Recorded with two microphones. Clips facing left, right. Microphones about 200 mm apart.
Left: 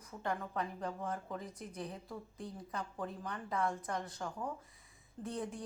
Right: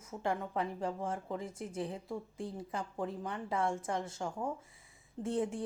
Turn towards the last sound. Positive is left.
turn(degrees=-30)  # may be behind; listen again after turning